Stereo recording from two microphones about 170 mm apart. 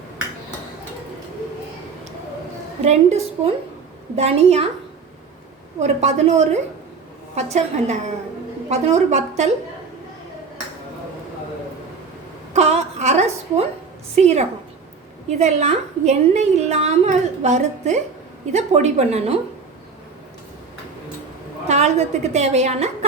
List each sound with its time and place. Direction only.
2.8 s a woman's voice: 40° right (ahead or behind)
5.8 s a woman's voice: 40° right (ahead or behind)
12.5 s a sound: 40° right (ahead or behind)
15.4 s a woman's voice: 40° right (ahead or behind)
21.7 s a woman's voice: 40° right (ahead or behind)